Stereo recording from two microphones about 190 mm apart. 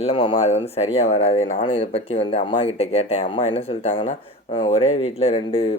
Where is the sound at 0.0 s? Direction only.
30° left (ahead or behind).